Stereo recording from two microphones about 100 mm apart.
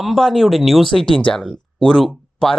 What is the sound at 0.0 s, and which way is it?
Speech, centre (ahead or behind).